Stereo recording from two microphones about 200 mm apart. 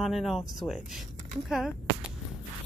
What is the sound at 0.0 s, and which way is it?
Speech, centre (ahead or behind).